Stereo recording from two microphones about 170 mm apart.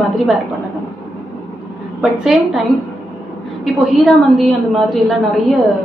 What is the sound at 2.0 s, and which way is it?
A woman's voice, 5° right (ahead or behind).